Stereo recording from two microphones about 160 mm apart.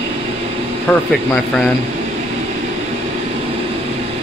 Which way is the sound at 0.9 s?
5° left (ahead or behind).